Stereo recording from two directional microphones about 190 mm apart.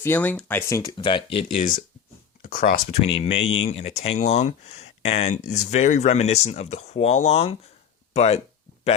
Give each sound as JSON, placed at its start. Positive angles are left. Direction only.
{"t": 0.0, "sound": "speech", "side_deg": 10}
{"t": 0.9, "sound": "speech", "side_deg": 25}
{"t": 2.4, "sound": "speech", "side_deg": 50}
{"t": 3.1, "sound": "speech", "side_deg": 30}
{"t": 3.4, "sound": "speech", "side_deg": 90}
{"t": 3.7, "sound": "speech", "side_deg": 35}